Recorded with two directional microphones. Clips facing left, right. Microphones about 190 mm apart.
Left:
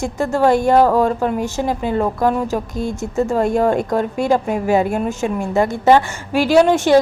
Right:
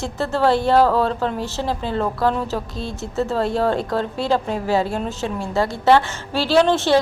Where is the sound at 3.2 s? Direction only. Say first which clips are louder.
Left 4 dB; 15° left (ahead or behind).